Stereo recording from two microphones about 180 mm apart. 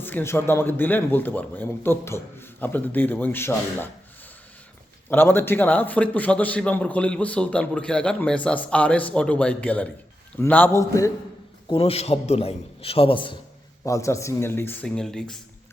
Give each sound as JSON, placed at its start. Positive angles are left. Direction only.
{"t": 0.0, "sound": "a man's voice", "side_deg": 10}
{"t": 5.0, "sound": "a man's voice", "side_deg": 10}
{"t": 11.7, "sound": "a man's voice", "side_deg": 35}
{"t": 13.8, "sound": "a man's voice", "side_deg": 15}